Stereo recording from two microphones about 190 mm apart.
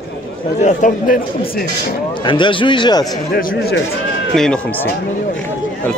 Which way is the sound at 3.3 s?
50° left (ahead or behind).